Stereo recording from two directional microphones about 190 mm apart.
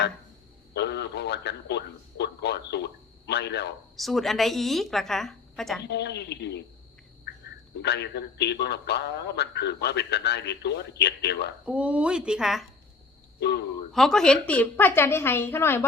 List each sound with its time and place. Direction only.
0.7 s a man's voice: 60° left (ahead or behind)
3.9 s a woman's voice: centre (ahead or behind)
5.8 s a man's voice: 65° left (ahead or behind)
11.6 s a woman's voice: 5° right (ahead or behind)
13.4 s a man's voice: 60° left (ahead or behind)
13.9 s a woman's voice: centre (ahead or behind)